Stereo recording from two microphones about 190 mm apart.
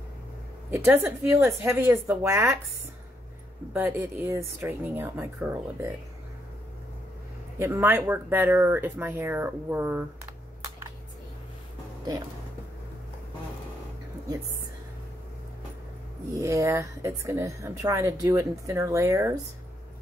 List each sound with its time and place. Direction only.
0.7 s a woman's voice: 15° right (ahead or behind)
3.7 s a woman's voice: 10° right (ahead or behind)
7.5 s a woman's voice: 10° right (ahead or behind)
16.3 s a woman's voice: 15° right (ahead or behind)